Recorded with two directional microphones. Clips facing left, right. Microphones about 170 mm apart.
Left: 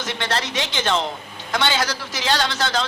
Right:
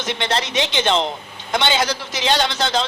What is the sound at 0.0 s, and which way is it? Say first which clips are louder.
A man's voice: right 3 dB; 20° right (ahead or behind).